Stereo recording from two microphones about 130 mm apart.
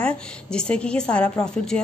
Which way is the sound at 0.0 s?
5° left (ahead or behind).